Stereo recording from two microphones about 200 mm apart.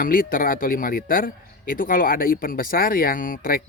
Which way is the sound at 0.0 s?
45° left (ahead or behind).